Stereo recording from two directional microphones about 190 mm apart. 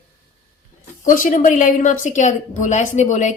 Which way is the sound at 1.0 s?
45° left (ahead or behind).